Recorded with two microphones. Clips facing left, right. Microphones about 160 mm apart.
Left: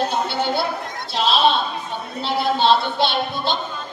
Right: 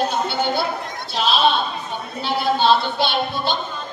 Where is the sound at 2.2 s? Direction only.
Centre (ahead or behind).